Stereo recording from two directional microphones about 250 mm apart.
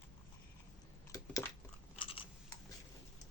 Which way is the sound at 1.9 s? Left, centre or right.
Left.